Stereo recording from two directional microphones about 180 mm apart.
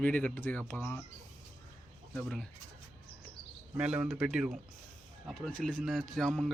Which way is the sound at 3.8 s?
5° right (ahead or behind).